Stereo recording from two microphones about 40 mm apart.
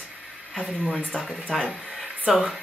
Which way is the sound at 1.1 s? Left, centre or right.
Centre.